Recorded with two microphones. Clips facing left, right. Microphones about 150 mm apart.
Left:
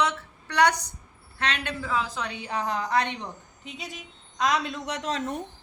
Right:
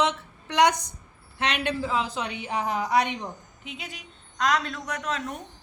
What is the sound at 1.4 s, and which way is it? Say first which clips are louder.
A woman's voice: right 3 dB; 15° right (ahead or behind).